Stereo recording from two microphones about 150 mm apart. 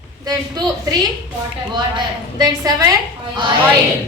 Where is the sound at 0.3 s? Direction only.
25° right (ahead or behind).